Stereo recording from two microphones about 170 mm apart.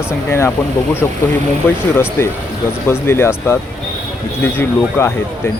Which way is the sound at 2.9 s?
15° left (ahead or behind).